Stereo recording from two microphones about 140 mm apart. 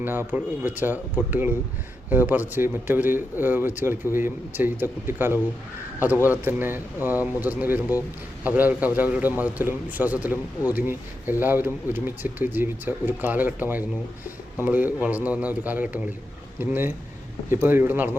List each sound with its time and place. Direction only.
0.0 s a man's voice: 15° right (ahead or behind)
6.4 s a man's voice: 15° right (ahead or behind)